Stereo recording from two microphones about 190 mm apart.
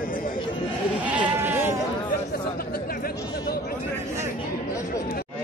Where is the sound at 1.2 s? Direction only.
10° right (ahead or behind).